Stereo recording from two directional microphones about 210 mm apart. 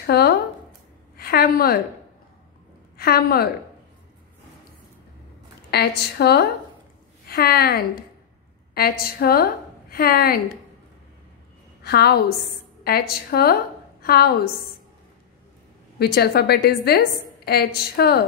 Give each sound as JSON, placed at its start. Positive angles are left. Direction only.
{"t": 0.0, "sound": "a sound", "side_deg": 50}
{"t": 3.0, "sound": "a woman's voice", "side_deg": 45}
{"t": 5.7, "sound": "a woman's voice", "side_deg": 50}
{"t": 11.8, "sound": "a woman's voice", "side_deg": 50}
{"t": 16.0, "sound": "a woman's voice", "side_deg": 50}